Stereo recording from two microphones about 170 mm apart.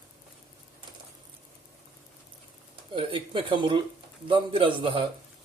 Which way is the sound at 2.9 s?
30° right (ahead or behind).